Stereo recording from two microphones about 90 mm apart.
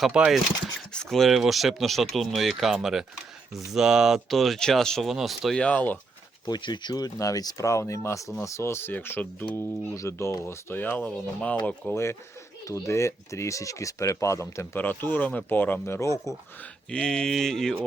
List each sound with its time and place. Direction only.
0.3 s speech: 5° right (ahead or behind)
5.5 s speech: 15° left (ahead or behind)
6.4 s speech: 55° left (ahead or behind); by 9.5 s 20° left (ahead or behind)
9.9 s speech: 35° left (ahead or behind); by 11.9 s 15° left (ahead or behind)
12.6 s speech: 35° left (ahead or behind)
16.0 s speech: 35° left (ahead or behind)
16.9 s speech: 10° left (ahead or behind)